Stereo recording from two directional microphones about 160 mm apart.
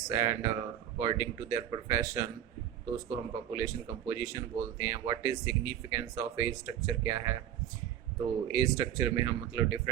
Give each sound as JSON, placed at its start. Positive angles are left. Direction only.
{"t": 0.1, "sound": "speech", "side_deg": -20}
{"t": 8.5, "sound": "speech", "side_deg": -20}